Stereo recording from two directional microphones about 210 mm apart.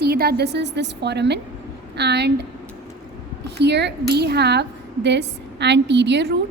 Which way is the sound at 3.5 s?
55° right (ahead or behind).